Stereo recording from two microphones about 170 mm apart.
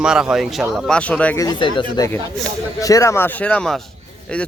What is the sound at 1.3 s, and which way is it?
Speech, 25° left (ahead or behind).